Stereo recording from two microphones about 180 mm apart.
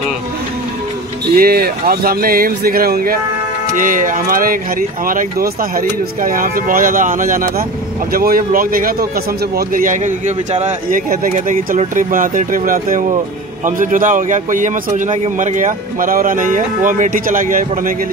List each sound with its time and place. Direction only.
1.3 s a man's voice: 55° right (ahead or behind)